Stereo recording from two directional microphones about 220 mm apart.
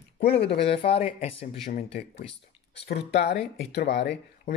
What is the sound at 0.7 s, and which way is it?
Speech, 25° left (ahead or behind).